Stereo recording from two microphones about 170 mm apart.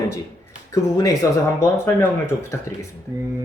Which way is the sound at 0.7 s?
20° left (ahead or behind).